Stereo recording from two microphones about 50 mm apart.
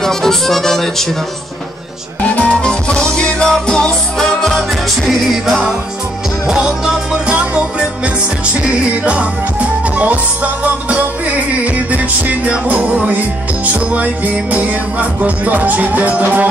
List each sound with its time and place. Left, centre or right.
0.0 s speech: centre
2.2 s music: left; by 5.6 s centre
6.4 s music: centre
7.3 s music: right